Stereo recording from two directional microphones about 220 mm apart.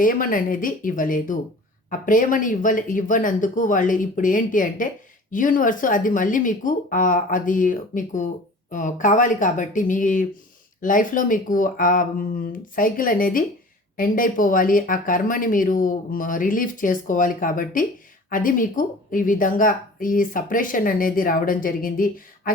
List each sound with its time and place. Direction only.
0.0 s speech: 40° left (ahead or behind)